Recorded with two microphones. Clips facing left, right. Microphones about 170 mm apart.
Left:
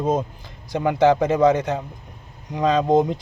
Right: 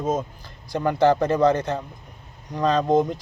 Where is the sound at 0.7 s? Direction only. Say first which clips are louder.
Left 2 dB; 15° left (ahead or behind).